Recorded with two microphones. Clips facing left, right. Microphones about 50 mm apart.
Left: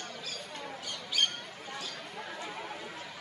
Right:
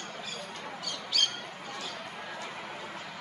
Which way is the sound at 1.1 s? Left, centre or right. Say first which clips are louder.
Even; centre.